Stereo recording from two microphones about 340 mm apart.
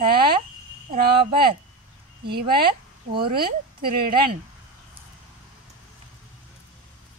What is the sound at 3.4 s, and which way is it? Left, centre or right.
A woman's voice, right.